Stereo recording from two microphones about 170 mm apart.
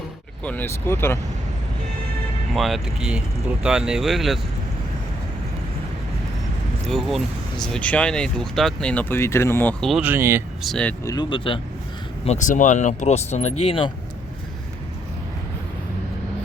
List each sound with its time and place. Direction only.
0.4 s speech: 10° left (ahead or behind)
2.5 s speech: centre (ahead or behind)
6.8 s speech: centre (ahead or behind)
9.8 s speech: 5° right (ahead or behind)
10.6 s speech: 5° left (ahead or behind)
11.0 s speech: 25° left (ahead or behind)
12.2 s speech: 45° left (ahead or behind)